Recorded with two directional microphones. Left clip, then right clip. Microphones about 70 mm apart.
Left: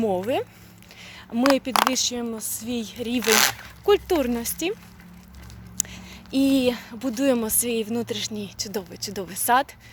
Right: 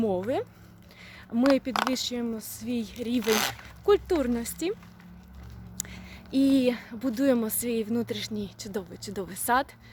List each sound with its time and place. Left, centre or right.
0.2 s speech: centre
1.3 s speech: right
3.2 s speech: left
4.0 s speech: centre
5.7 s a sound: right
6.3 s a woman's voice: centre
7.9 s speech: right